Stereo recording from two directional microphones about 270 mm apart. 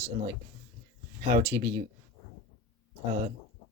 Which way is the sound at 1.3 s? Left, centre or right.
Centre.